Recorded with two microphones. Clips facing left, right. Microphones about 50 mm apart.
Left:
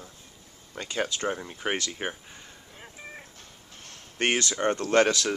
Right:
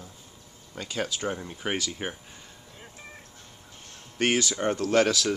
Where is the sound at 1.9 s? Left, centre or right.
Centre.